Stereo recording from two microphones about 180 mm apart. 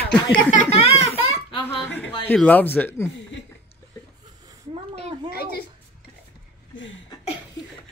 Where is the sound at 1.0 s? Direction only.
35° left (ahead or behind).